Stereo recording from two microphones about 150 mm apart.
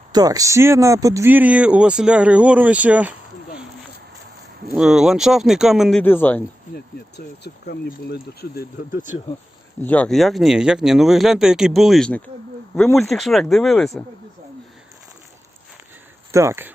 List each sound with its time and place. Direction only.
0.1 s speech: 25° right (ahead or behind); by 3.2 s 10° right (ahead or behind)
4.7 s speech: 5° right (ahead or behind)
6.0 s speech: 15° left (ahead or behind)
7.4 s speech: 75° left (ahead or behind)
9.8 s speech: 10° left (ahead or behind)
16.3 s speech: 20° right (ahead or behind)